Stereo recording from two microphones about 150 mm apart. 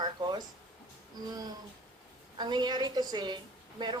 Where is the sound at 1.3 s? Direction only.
25° right (ahead or behind).